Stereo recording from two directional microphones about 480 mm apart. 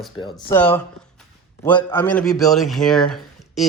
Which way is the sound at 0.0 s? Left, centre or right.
Centre.